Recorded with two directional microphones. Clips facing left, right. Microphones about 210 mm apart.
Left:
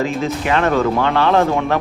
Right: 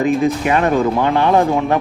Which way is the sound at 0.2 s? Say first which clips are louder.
Right 3 dB; 15° right (ahead or behind).